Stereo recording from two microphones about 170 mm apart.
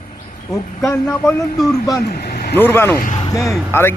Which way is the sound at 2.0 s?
65° left (ahead or behind).